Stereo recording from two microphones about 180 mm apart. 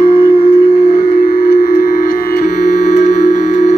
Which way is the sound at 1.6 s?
45° left (ahead or behind).